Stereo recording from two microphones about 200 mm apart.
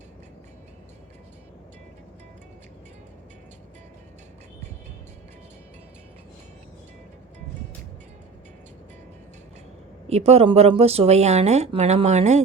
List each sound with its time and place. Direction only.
10.1 s speech: 30° right (ahead or behind)